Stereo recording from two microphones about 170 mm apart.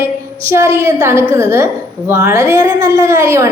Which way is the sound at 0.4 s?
15° right (ahead or behind).